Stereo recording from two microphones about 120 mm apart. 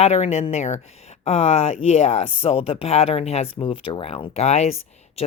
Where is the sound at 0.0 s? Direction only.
60° left (ahead or behind).